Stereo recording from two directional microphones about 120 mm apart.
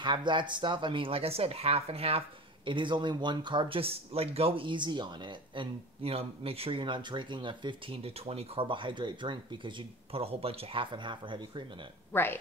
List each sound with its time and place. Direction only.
0.0 s speech: 40° right (ahead or behind)
12.1 s speech: 20° left (ahead or behind)